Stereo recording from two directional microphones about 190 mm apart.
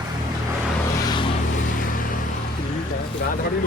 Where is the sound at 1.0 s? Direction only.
20° left (ahead or behind).